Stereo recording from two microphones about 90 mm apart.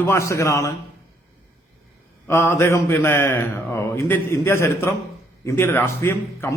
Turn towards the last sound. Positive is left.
turn(degrees=25)  # may be behind; listen again after turning